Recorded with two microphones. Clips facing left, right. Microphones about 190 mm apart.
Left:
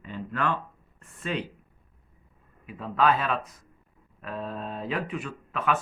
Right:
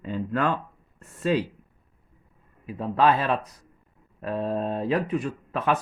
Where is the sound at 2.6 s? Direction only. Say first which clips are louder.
Right 3 dB; 35° right (ahead or behind).